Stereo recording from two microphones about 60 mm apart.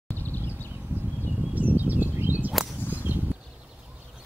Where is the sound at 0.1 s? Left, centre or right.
Left.